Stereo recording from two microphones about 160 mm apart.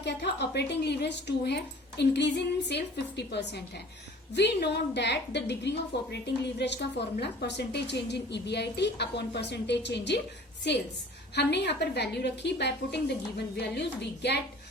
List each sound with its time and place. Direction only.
0.0 s a woman's voice: 90° left